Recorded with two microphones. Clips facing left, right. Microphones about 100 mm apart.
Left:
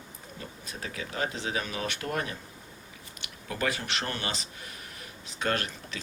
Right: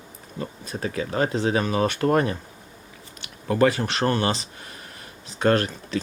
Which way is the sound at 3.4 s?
40° right (ahead or behind).